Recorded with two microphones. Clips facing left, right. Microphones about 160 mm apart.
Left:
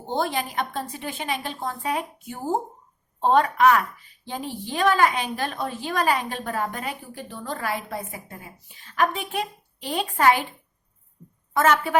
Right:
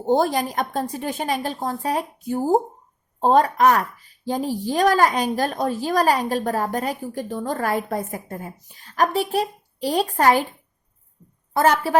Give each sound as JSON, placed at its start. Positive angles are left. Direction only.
{"t": 0.0, "sound": "a woman's voice", "side_deg": -40}
{"t": 11.5, "sound": "a woman's voice", "side_deg": -35}